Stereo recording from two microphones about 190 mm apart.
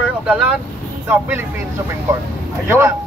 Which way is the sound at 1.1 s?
10° right (ahead or behind).